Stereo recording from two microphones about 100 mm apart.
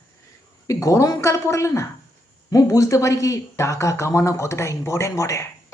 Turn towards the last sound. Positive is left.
turn(degrees=30)  # may be behind; listen again after turning